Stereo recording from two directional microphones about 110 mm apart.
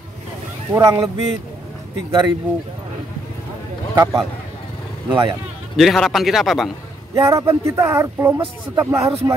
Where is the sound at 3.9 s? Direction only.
30° right (ahead or behind).